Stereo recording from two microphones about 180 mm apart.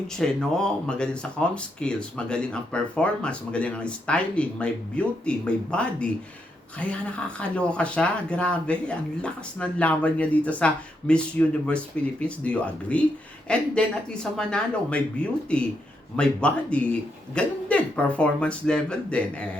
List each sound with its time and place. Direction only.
0.2 s speech: 5° left (ahead or behind)